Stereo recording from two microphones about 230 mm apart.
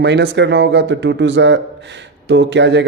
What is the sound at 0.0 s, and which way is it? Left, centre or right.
A man's voice, right.